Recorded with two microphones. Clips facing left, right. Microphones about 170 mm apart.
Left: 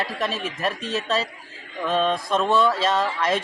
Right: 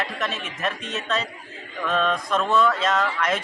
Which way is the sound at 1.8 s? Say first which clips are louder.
Left 1 dB; 30° left (ahead or behind).